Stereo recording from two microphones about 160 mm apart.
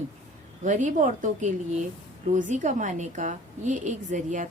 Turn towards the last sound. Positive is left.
turn(degrees=-50)  # may be behind; listen again after turning